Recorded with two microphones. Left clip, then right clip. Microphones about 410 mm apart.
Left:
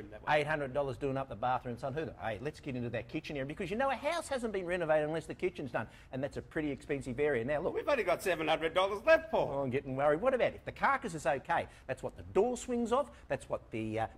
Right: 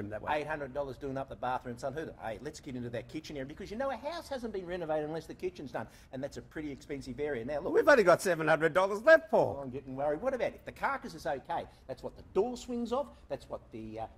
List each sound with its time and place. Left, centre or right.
0.2 s speech: left
7.7 s speech: right
9.7 s speech: left
11.2 s speech: left